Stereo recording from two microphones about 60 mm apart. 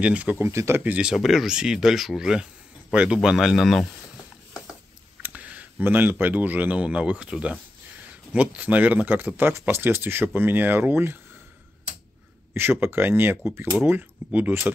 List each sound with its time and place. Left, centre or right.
0.0 s speech: right
0.4 s speech: right
1.1 s speech: centre
5.2 s speech: right
9.5 s speech: right
12.5 s speech: right